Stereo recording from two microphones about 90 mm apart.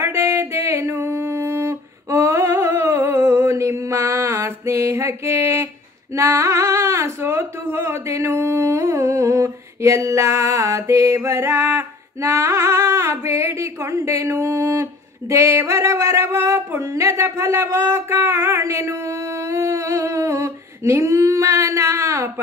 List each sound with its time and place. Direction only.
0.0 s music: 30° right (ahead or behind)
6.1 s speech: 30° right (ahead or behind)